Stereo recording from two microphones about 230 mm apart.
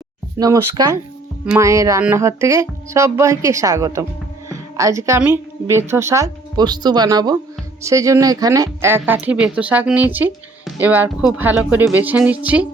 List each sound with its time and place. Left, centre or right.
0.3 s a woman's voice: centre